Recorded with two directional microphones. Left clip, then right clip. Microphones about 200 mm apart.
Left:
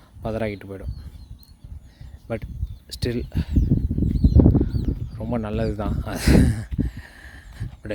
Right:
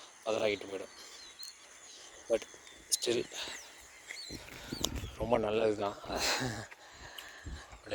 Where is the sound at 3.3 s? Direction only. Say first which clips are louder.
Left 6 dB; 20° left (ahead or behind).